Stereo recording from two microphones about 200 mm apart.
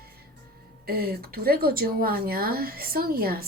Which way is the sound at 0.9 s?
50° right (ahead or behind).